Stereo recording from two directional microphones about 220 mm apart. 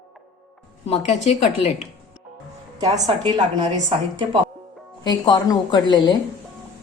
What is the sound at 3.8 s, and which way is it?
Speech, 30° right (ahead or behind).